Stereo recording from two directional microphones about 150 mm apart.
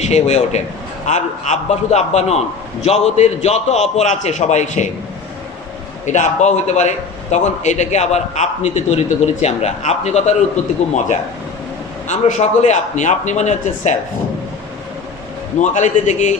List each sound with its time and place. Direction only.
0.0 s a man's voice: 50° left (ahead or behind)
6.0 s a man's voice: 55° left (ahead or behind)
15.6 s a man's voice: 55° left (ahead or behind)